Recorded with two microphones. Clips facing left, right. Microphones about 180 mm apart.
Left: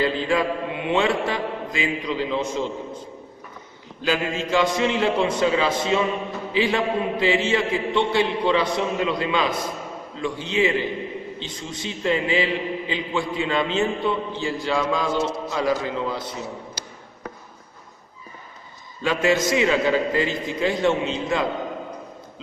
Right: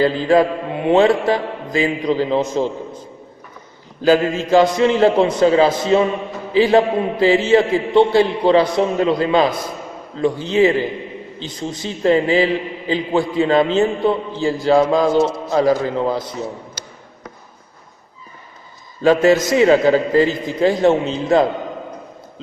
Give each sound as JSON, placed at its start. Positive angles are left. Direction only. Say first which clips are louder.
{"t": 0.0, "sound": "a man's voice", "louder": "right 7 dB", "side_deg": -40}
{"t": 4.0, "sound": "a man's voice", "louder": "right 9 dB", "side_deg": -40}
{"t": 19.0, "sound": "a man's voice", "louder": "right 8 dB", "side_deg": -40}